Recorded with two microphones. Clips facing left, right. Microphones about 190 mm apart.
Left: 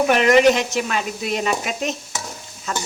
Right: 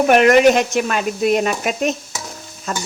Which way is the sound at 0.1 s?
50° right (ahead or behind).